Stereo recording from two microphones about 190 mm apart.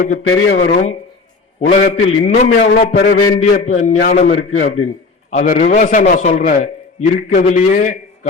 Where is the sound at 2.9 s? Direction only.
60° left (ahead or behind).